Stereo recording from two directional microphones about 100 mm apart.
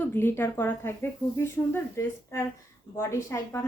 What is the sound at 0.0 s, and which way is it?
Speech, 25° left (ahead or behind).